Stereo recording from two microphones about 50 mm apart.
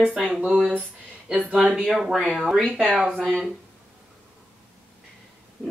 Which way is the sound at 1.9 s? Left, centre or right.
Centre.